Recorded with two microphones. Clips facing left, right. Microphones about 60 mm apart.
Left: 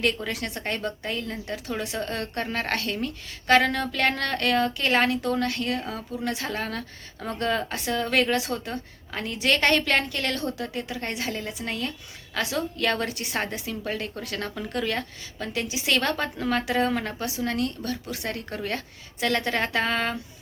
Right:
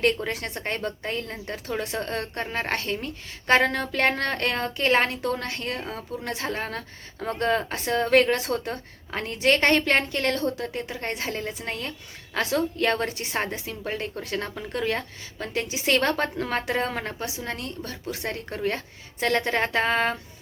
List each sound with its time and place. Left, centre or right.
0.3 s a woman's voice: right